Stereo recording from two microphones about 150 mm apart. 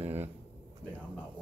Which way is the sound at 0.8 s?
5° left (ahead or behind).